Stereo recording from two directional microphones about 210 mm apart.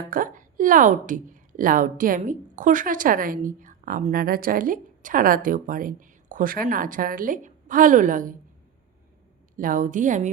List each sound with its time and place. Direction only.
0.0 s a woman's voice: 40° right (ahead or behind)
9.6 s a woman's voice: 40° right (ahead or behind)